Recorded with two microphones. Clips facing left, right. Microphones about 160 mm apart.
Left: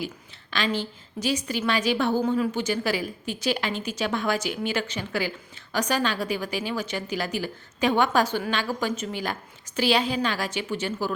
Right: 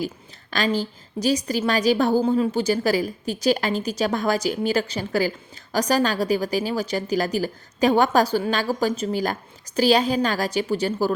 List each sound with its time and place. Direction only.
0.5 s a woman's voice: 40° right (ahead or behind)